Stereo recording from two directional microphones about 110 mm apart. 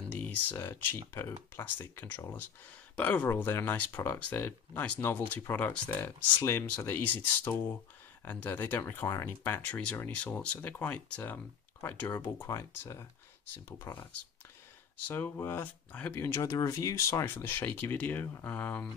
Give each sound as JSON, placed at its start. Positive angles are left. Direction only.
{"t": 0.2, "sound": "speech", "side_deg": 15}
{"t": 15.0, "sound": "speech", "side_deg": 20}
{"t": 16.2, "sound": "speech", "side_deg": 25}